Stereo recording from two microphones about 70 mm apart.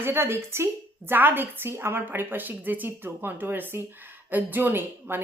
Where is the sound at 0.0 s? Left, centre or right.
Right.